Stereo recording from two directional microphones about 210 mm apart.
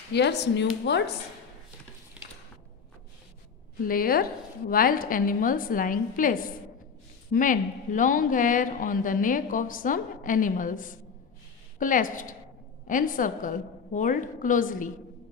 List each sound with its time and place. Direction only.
0.1 s speech: 55° left (ahead or behind)
2.2 s a sound: 5° right (ahead or behind)
3.8 s a woman's voice: 45° left (ahead or behind)